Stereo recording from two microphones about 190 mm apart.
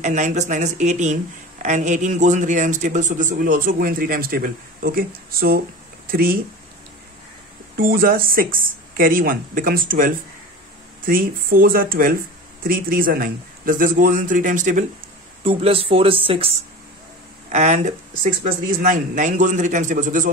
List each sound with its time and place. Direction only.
0.0 s speech: 40° right (ahead or behind)
7.7 s speech: 50° right (ahead or behind)
15.4 s speech: 30° right (ahead or behind)